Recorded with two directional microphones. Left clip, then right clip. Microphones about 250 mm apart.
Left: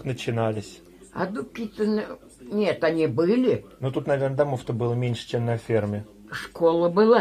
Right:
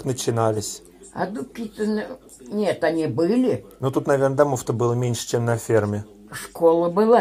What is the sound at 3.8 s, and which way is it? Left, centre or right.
A man's voice, right.